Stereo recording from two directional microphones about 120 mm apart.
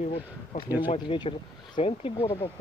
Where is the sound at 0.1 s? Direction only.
50° left (ahead or behind).